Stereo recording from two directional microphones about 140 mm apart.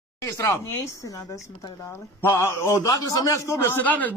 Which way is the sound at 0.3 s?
20° left (ahead or behind).